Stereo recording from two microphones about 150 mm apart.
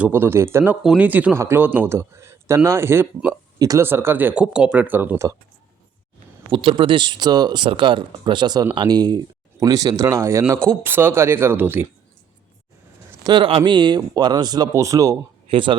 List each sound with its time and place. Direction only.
0.0 s speech: 15° right (ahead or behind)
6.5 s speech: 35° right (ahead or behind); by 11.9 s 15° right (ahead or behind)
13.2 s speech: 35° right (ahead or behind)
15.4 s speech: 35° right (ahead or behind)